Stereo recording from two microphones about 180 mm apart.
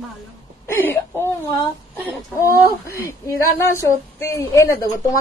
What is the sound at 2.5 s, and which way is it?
A woman's voice, 15° left (ahead or behind).